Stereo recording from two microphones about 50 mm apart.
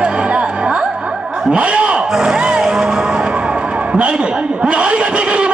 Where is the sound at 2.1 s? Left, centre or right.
Centre.